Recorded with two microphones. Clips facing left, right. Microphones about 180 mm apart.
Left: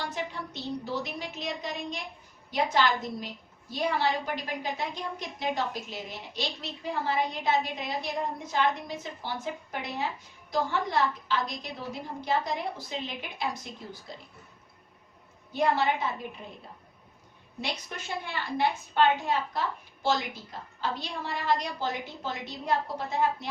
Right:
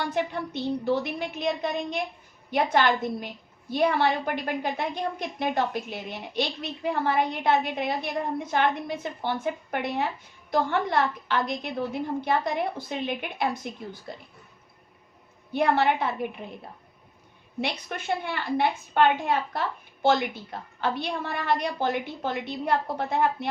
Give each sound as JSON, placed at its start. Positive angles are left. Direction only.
{"t": 0.1, "sound": "a woman's voice", "side_deg": -55}
{"t": 15.5, "sound": "a woman's voice", "side_deg": -60}
{"t": 17.6, "sound": "a woman's voice", "side_deg": -60}